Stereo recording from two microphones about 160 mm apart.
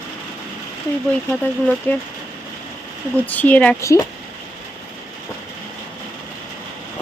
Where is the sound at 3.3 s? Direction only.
10° left (ahead or behind).